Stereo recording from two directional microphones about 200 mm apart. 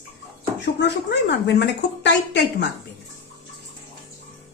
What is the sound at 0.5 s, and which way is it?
A woman's voice, 60° left (ahead or behind).